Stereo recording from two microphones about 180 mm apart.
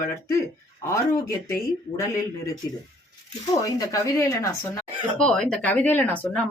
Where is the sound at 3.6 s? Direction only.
20° left (ahead or behind).